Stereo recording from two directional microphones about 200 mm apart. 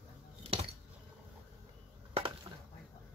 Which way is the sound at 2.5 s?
20° right (ahead or behind).